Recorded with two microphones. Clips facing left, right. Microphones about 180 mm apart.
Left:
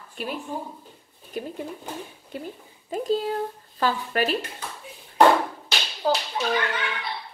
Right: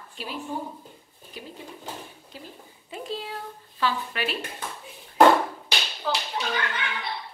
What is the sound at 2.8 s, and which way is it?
A woman's voice, 40° left (ahead or behind).